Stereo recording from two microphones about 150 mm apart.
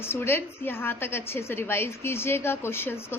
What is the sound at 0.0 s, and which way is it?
A woman's voice, 15° left (ahead or behind).